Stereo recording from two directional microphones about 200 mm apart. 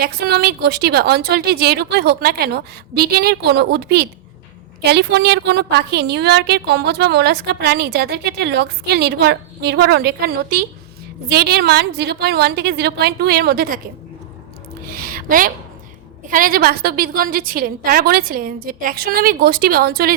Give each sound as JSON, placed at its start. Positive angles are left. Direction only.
{"t": 0.0, "sound": "a woman's voice", "side_deg": -50}
{"t": 14.8, "sound": "a sound", "side_deg": -45}
{"t": 16.3, "sound": "a woman's voice", "side_deg": -45}